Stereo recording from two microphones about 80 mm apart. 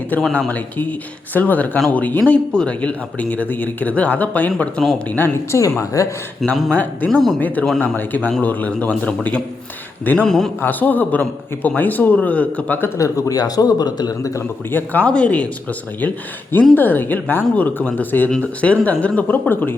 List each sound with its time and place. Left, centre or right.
0.3 s speech: left
5.5 s a man's voice: left
6.7 s speech: centre
7.1 s speech: centre
7.3 s speech: left
10.2 s speech: centre
10.6 s speech: left
13.0 s a man's voice: left
14.7 s speech: left